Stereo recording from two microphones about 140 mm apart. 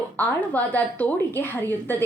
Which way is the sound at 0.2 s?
15° left (ahead or behind).